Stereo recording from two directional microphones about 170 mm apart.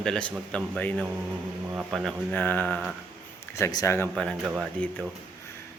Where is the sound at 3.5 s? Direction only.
20° left (ahead or behind).